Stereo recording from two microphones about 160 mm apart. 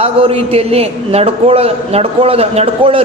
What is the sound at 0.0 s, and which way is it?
A man's voice, 40° right (ahead or behind).